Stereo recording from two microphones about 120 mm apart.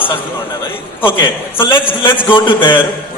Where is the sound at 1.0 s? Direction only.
20° left (ahead or behind).